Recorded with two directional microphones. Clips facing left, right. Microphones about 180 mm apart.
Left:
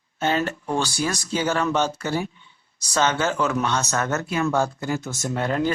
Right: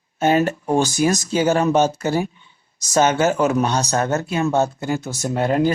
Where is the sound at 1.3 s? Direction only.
20° right (ahead or behind).